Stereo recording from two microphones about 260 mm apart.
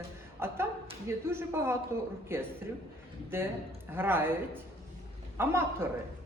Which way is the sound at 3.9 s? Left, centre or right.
Centre.